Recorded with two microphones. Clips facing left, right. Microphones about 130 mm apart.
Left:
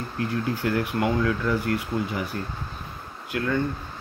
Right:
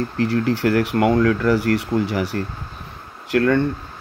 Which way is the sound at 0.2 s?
80° right.